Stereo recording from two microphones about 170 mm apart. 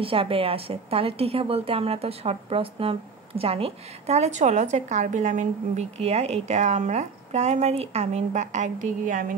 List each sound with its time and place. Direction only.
0.0 s a woman's voice: 30° right (ahead or behind); by 9.3 s 50° right (ahead or behind)